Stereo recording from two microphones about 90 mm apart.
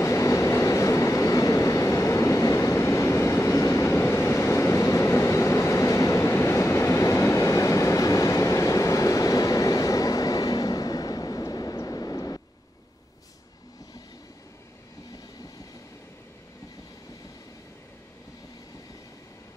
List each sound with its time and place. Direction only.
0.0 s train: 35° left (ahead or behind)
11.7 s vehicle: 40° left (ahead or behind)